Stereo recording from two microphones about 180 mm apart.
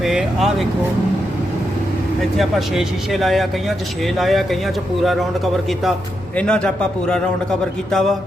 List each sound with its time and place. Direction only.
0.0 s speech: centre (ahead or behind)
2.4 s speech: centre (ahead or behind)
6.3 s speech: 5° left (ahead or behind)
7.9 s speech: 5° left (ahead or behind)